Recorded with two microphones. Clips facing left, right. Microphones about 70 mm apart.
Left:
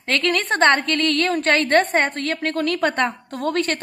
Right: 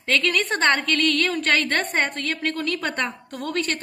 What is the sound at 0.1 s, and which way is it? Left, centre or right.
A woman's voice, left.